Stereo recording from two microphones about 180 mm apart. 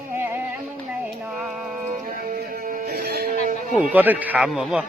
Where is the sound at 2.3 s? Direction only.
55° right (ahead or behind).